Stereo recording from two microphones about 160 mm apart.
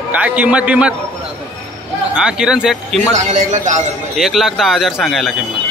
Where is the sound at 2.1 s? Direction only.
5° right (ahead or behind).